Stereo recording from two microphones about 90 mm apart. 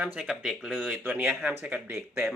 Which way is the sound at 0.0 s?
15° right (ahead or behind).